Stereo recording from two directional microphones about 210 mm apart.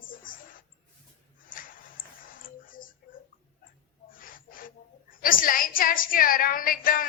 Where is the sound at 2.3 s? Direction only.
40° left (ahead or behind).